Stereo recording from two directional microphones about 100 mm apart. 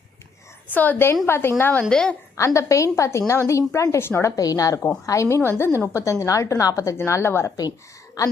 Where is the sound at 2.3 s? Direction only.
30° left (ahead or behind).